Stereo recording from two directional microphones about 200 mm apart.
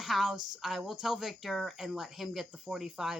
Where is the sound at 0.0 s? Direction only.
Centre (ahead or behind).